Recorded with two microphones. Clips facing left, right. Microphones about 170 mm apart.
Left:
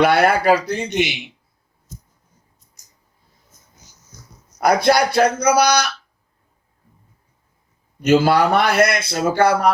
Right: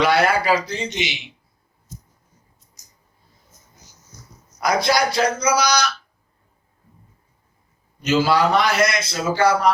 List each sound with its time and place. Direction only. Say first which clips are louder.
0.0 s a man's voice: left 3 dB; 55° left (ahead or behind)
4.6 s a man's voice: left 4 dB; 55° left (ahead or behind)
8.0 s a man's voice: left 3 dB; 55° left (ahead or behind)